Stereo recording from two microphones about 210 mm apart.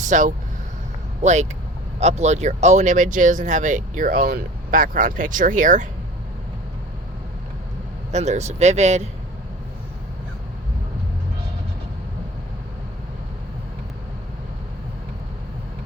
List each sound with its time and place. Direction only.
0.0 s speech: 35° right (ahead or behind)
8.1 s speech: 30° right (ahead or behind)